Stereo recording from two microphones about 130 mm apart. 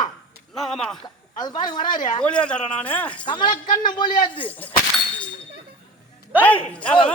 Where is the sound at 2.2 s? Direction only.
10° left (ahead or behind).